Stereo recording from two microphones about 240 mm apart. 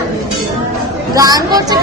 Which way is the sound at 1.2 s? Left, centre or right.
Centre.